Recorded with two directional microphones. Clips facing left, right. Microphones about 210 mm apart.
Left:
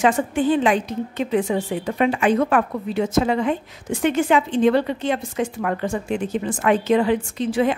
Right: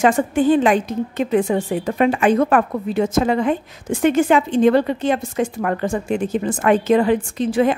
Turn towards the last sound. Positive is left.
turn(degrees=-45)  # may be behind; listen again after turning